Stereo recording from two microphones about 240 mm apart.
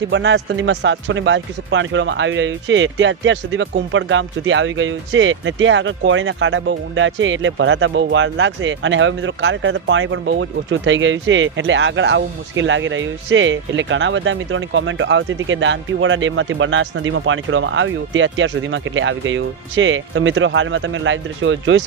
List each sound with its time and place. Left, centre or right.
0.1 s speech: right